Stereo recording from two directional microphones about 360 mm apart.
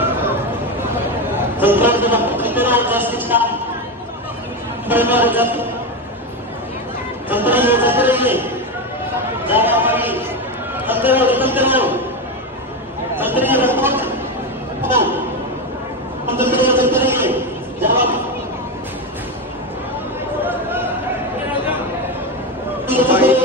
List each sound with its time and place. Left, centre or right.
1.6 s a man's voice: centre
4.8 s a man's voice: centre
7.2 s a man's voice: centre
9.5 s a man's voice: centre
13.2 s a man's voice: centre
14.8 s chatter: centre
16.3 s a sound: centre
20.4 s chatter: centre
22.8 s a sound: centre